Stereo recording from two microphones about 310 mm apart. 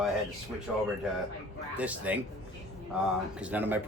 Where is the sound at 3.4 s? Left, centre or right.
Centre.